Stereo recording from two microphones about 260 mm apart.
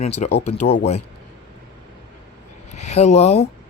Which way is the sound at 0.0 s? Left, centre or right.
Left.